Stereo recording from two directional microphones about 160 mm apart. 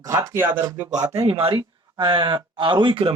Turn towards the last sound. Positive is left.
turn(degrees=-35)  # may be behind; listen again after turning